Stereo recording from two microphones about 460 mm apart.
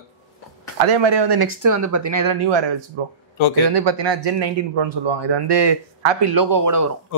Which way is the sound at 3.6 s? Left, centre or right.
Right.